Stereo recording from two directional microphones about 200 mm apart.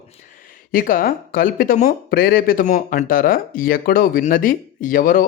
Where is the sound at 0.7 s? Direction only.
45° left (ahead or behind).